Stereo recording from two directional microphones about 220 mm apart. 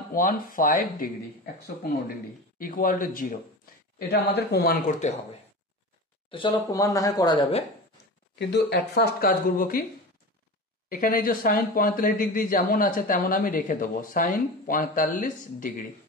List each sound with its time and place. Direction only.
0.1 s speech: 40° left (ahead or behind)
6.3 s speech: 20° left (ahead or behind)
8.4 s speech: 50° left (ahead or behind)
10.9 s speech: 40° left (ahead or behind)